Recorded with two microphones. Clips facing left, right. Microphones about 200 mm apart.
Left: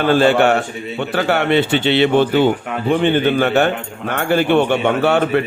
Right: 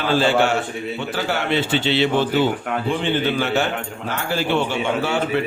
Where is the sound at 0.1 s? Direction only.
60° left (ahead or behind).